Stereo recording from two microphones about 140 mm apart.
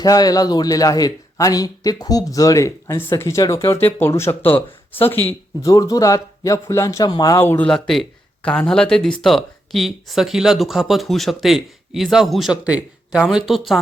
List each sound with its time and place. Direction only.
0.0 s speech: 25° left (ahead or behind)
5.6 s speech: 25° left (ahead or behind)
7.7 s speech: 5° left (ahead or behind)